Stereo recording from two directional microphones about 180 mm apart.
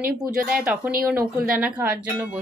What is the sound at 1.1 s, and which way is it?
Speech, 10° right (ahead or behind).